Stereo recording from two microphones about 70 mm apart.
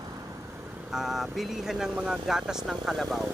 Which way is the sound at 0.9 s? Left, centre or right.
Centre.